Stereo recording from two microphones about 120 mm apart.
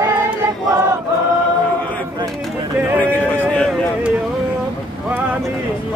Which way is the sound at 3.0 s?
15° left (ahead or behind).